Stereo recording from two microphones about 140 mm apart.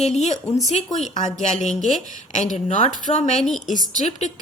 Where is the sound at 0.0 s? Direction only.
55° left (ahead or behind).